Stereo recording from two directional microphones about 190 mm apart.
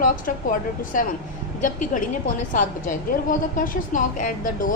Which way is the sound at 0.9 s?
45° left (ahead or behind).